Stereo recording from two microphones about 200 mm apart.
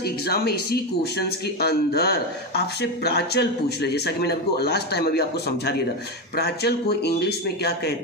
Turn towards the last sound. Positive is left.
turn(degrees=55)  # may be behind; listen again after turning